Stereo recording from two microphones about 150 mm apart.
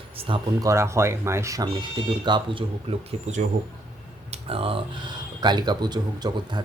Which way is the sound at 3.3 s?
50° right (ahead or behind).